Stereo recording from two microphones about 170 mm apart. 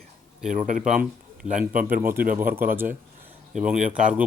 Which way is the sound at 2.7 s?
10° right (ahead or behind).